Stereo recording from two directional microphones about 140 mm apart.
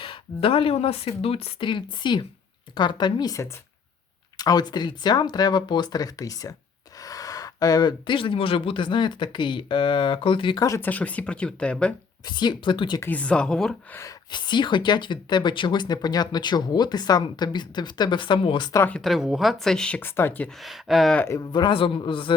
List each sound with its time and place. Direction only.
0.0 s speech: 40° left (ahead or behind)
10.7 s speech: 15° left (ahead or behind)
12.2 s speech: 30° left (ahead or behind)
13.0 s speech: 10° left (ahead or behind)
14.3 s speech: 35° left (ahead or behind)
18.7 s speech: 15° left (ahead or behind)
18.9 s speech: centre (ahead or behind)
20.6 s speech: centre (ahead or behind)
21.3 s speech: 35° left (ahead or behind)